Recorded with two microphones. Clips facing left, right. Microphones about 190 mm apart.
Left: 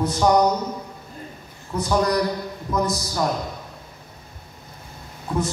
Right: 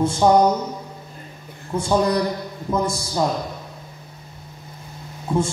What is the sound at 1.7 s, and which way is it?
A man's voice, 25° right (ahead or behind).